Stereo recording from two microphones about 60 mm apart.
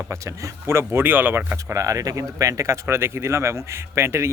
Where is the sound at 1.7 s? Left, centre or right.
Right.